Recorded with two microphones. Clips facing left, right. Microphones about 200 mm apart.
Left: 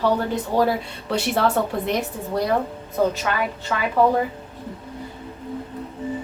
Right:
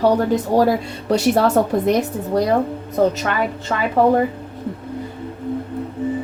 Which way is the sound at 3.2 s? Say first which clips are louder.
Right 3 dB; 50° right (ahead or behind).